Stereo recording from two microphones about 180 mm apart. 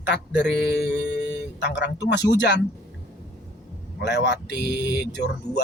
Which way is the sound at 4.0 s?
70° left (ahead or behind).